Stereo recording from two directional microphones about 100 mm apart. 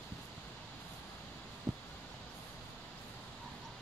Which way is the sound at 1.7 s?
30° right (ahead or behind).